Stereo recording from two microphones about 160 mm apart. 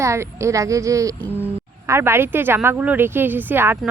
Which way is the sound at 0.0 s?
20° right (ahead or behind).